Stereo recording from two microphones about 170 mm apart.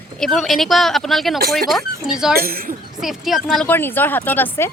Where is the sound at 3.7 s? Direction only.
10° left (ahead or behind).